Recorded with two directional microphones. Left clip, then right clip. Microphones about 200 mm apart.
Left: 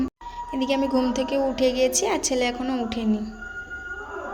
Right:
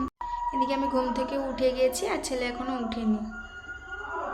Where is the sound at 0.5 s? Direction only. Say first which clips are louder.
Left 4 dB; 20° left (ahead or behind).